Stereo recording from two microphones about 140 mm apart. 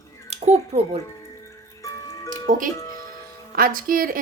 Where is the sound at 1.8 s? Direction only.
25° left (ahead or behind).